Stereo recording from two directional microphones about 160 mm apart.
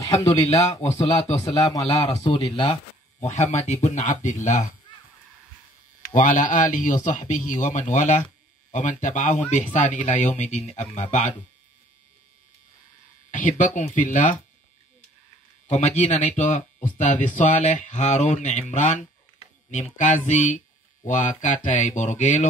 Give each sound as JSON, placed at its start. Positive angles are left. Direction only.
{"t": 0.5, "sound": "speech", "side_deg": 40}
{"t": 1.5, "sound": "a man's voice", "side_deg": 20}
{"t": 6.0, "sound": "speech", "side_deg": 50}
{"t": 13.3, "sound": "speech", "side_deg": 50}
{"t": 16.0, "sound": "speech", "side_deg": 50}